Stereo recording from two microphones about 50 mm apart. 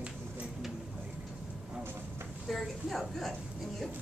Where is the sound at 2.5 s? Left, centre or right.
Centre.